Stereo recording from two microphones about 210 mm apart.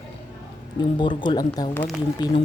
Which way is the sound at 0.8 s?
20° left (ahead or behind).